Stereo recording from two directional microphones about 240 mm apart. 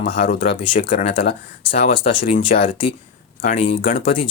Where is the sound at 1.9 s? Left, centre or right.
Left.